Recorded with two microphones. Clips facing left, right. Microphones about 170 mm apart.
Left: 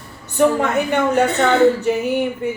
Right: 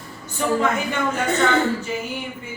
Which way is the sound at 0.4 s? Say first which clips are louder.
Left 8 dB; 60° left (ahead or behind).